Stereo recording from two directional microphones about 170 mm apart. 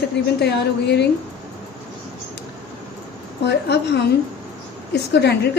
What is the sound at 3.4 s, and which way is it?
A woman's voice, 85° left.